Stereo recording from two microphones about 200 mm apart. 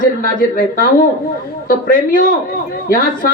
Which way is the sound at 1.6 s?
45° left (ahead or behind).